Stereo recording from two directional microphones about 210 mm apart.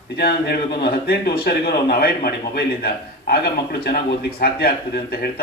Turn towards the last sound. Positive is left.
turn(degrees=50)  # may be behind; listen again after turning